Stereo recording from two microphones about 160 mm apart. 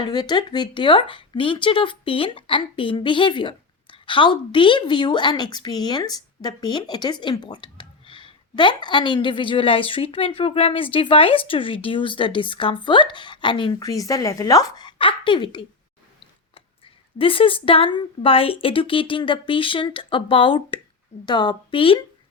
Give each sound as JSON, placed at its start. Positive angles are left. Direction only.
{"t": 0.0, "sound": "speech", "side_deg": 25}